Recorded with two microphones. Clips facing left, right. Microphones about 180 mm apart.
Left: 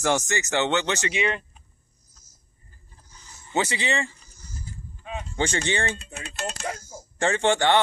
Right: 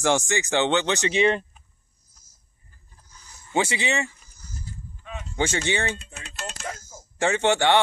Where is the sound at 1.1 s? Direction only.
30° right (ahead or behind).